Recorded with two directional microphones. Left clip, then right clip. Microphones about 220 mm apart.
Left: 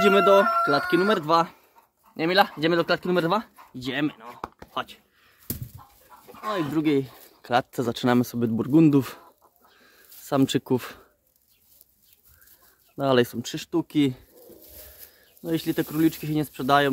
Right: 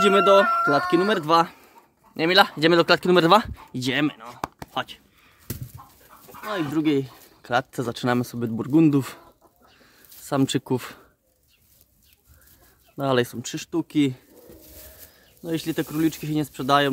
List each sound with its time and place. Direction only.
0.0 s speech: 5° right (ahead or behind)
5.8 s chicken: 20° left (ahead or behind)
6.4 s speech: 5° left (ahead or behind)
9.8 s a sound: centre (ahead or behind)
12.9 s speech: 5° left (ahead or behind)
15.4 s speech: 5° left (ahead or behind)